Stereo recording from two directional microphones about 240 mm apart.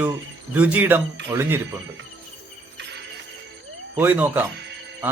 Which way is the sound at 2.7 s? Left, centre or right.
Right.